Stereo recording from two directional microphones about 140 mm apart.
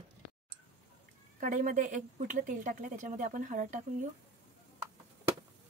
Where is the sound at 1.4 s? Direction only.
70° right (ahead or behind).